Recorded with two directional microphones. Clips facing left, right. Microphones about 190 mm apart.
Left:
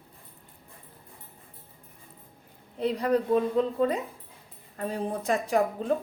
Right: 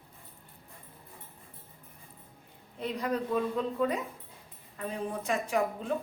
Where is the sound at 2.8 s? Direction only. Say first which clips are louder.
Left 7 dB; 35° left (ahead or behind).